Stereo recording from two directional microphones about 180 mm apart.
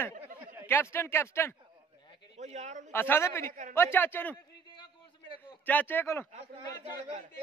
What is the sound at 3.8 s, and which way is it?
Speech, 10° left (ahead or behind).